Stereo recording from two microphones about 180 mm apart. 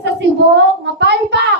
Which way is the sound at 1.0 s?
75° right (ahead or behind).